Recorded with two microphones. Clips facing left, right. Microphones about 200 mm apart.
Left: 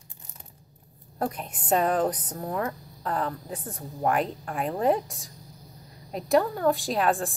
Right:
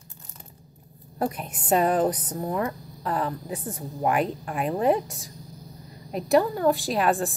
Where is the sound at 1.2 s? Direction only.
5° right (ahead or behind).